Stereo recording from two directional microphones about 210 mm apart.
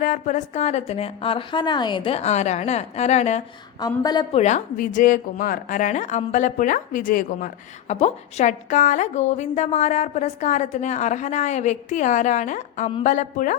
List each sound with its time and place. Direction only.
0.0 s a woman's voice: 35° left (ahead or behind)
3.8 s a woman's voice: 20° left (ahead or behind); by 13.6 s 40° left (ahead or behind)